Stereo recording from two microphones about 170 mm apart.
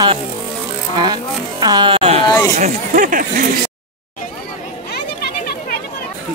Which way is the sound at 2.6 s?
50° right (ahead or behind).